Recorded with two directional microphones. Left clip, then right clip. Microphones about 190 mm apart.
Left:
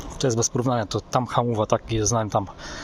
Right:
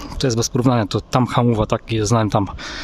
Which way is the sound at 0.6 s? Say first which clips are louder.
Right 6 dB; 60° right (ahead or behind).